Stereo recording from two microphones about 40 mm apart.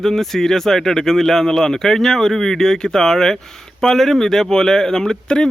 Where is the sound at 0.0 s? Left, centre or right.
Centre.